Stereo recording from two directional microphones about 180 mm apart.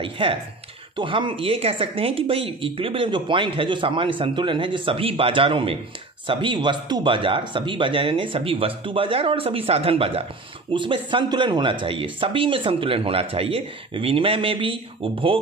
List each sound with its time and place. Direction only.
0.0 s speech: 30° right (ahead or behind)